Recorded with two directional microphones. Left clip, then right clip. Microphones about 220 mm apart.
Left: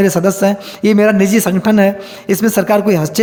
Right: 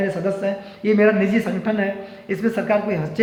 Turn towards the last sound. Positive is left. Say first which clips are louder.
# left 8 dB
turn(degrees=50)  # may be behind; listen again after turning